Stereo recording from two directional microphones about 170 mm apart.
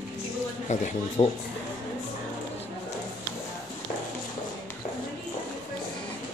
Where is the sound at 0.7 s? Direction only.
45° left (ahead or behind).